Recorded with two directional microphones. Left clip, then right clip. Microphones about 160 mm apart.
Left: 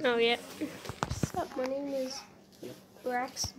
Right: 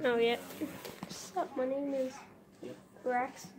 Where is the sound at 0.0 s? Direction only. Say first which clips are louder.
Left 2 dB; 15° left (ahead or behind).